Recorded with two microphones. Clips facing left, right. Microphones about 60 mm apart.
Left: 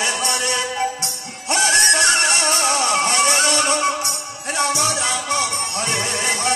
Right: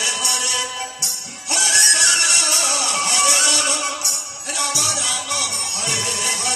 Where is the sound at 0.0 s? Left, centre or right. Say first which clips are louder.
Left 3 dB; left.